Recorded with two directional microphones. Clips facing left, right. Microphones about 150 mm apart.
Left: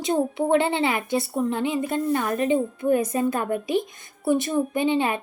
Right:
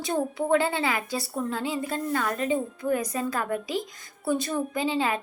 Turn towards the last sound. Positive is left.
turn(degrees=25)  # may be behind; listen again after turning